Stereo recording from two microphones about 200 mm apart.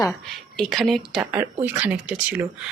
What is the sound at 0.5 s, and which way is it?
Speech, centre (ahead or behind).